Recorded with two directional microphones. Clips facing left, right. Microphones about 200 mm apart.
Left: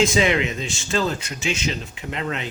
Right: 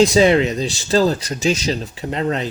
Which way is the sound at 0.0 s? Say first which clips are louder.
Right 6 dB; 35° right (ahead or behind).